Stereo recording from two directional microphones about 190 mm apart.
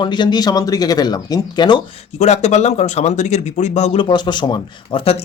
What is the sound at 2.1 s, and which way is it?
Speech, 35° left (ahead or behind).